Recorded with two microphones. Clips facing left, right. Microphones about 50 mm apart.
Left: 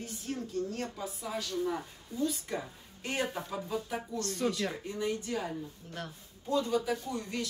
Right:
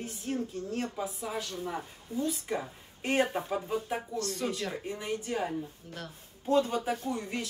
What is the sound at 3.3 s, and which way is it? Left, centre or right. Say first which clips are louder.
Speech: right 4 dB; right.